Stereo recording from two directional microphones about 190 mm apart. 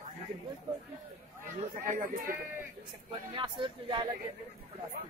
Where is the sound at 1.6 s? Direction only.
40° right (ahead or behind).